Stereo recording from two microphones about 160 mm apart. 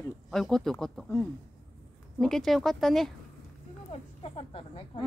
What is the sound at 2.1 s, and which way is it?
Speech, centre (ahead or behind).